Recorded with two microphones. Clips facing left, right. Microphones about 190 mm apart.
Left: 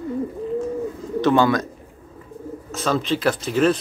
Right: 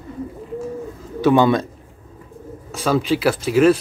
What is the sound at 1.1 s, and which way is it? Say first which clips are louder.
Bird: right 2 dB; 10° right (ahead or behind).